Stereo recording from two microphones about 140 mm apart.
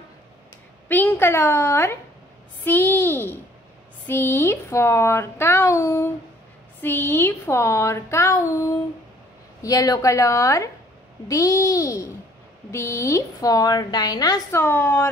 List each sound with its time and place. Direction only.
0.8 s speech: 15° left (ahead or behind)
14.6 s speech: 15° left (ahead or behind)